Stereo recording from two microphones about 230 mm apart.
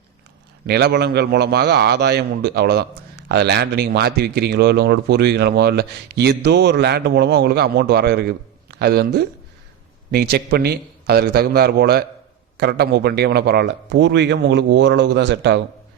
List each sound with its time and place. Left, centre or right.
0.7 s speech: right